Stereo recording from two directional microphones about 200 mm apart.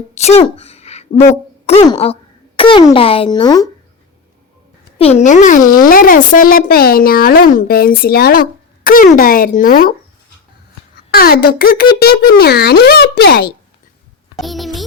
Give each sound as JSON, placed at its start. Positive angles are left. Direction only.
{"t": 0.1, "sound": "a sound", "side_deg": 35}
{"t": 1.6, "sound": "a child's voice", "side_deg": 30}
{"t": 4.9, "sound": "speech", "side_deg": 30}
{"t": 10.9, "sound": "speech", "side_deg": 50}
{"t": 14.3, "sound": "a child's voice", "side_deg": 0}